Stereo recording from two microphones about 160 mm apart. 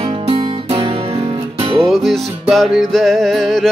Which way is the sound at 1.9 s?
Centre (ahead or behind).